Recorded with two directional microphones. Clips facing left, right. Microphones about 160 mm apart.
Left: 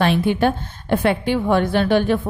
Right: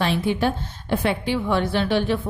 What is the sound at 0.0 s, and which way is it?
A woman's voice, 60° left (ahead or behind).